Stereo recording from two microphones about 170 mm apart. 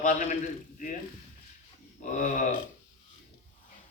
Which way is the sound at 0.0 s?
45° left (ahead or behind).